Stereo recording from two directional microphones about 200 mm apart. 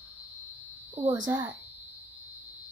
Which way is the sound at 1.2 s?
20° right (ahead or behind).